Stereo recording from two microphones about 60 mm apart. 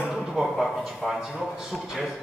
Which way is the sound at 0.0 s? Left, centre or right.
Centre.